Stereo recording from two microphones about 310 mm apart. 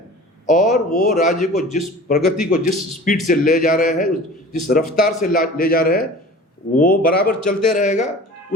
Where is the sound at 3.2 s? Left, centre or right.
Left.